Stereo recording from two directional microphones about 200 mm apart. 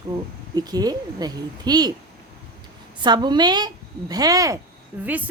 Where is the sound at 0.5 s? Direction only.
20° right (ahead or behind).